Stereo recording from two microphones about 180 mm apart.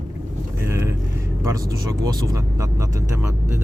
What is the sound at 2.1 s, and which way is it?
Speech, 20° right (ahead or behind).